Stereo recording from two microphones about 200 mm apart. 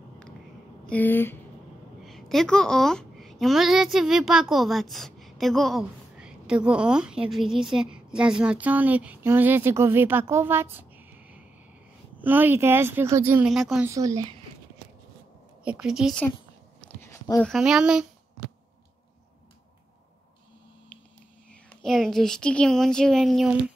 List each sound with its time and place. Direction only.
0.8 s a child's voice: 10° left (ahead or behind)
13.8 s speech: 15° right (ahead or behind)
15.6 s speech: 5° right (ahead or behind)
16.8 s a sound: 10° left (ahead or behind)
17.5 s speech: centre (ahead or behind)
21.5 s speech: centre (ahead or behind)